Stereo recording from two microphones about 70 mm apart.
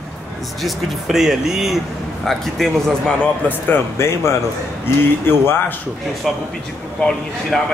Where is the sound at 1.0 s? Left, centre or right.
Centre.